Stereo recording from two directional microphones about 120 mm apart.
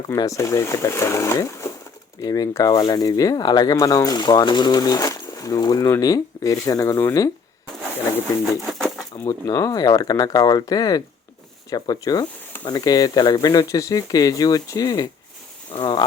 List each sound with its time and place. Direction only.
0.2 s speech: 25° left (ahead or behind)
9.2 s speech: 30° left (ahead or behind)